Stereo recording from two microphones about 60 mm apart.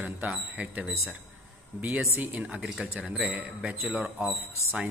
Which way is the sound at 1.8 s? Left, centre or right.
Right.